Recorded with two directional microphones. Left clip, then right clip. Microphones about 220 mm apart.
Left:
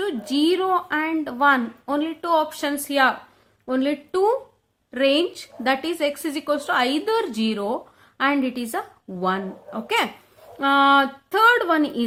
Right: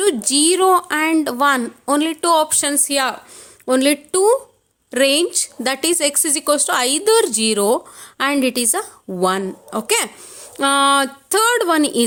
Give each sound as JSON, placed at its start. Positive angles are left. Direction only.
{"t": 0.0, "sound": "speech", "side_deg": -50}